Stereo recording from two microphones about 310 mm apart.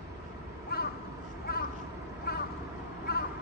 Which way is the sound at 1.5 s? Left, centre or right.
Left.